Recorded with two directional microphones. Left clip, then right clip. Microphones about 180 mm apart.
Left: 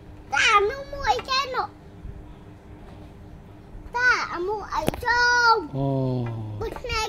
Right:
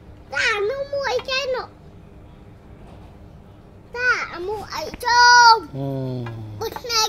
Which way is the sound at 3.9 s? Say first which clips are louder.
Even; 35° left (ahead or behind).